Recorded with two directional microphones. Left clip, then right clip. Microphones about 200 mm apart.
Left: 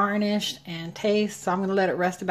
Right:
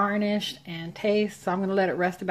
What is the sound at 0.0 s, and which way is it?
Speech, centre (ahead or behind).